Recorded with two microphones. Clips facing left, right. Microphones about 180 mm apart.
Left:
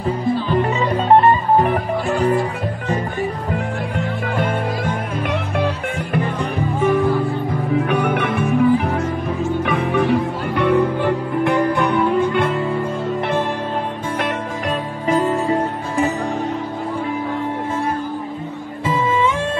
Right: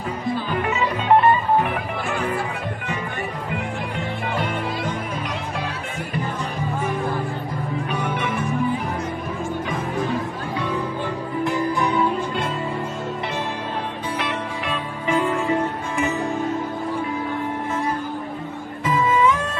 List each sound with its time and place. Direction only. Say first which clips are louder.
0.5 s music: left 5 dB; 35° left (ahead or behind)
4.4 s music: left 6 dB; 50° left (ahead or behind)
7.9 s music: left 6 dB; 65° left (ahead or behind)
14.2 s music: left 4 dB; 40° left (ahead or behind)
18.9 s music: even; 30° left (ahead or behind)